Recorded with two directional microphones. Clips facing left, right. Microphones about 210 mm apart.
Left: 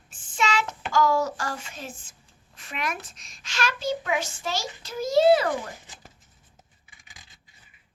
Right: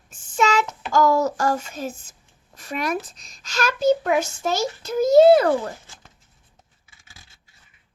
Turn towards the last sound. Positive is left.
turn(degrees=15)  # may be behind; listen again after turning